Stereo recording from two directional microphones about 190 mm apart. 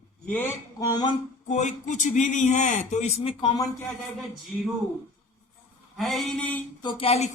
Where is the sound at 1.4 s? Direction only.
40° left (ahead or behind).